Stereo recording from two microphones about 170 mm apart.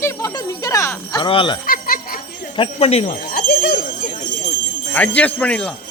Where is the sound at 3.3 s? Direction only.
60° left (ahead or behind).